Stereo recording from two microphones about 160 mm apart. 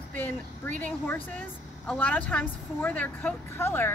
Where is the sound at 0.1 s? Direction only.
10° left (ahead or behind).